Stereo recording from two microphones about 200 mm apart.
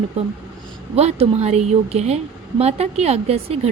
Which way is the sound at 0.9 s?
30° right (ahead or behind).